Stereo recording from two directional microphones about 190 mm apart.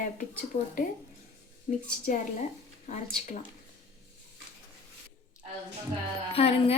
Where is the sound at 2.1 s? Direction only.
40° left (ahead or behind).